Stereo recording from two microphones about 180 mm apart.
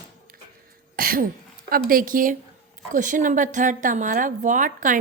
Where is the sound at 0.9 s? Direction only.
50° right (ahead or behind).